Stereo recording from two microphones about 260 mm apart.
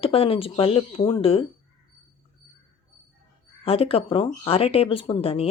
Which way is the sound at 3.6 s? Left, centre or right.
Left.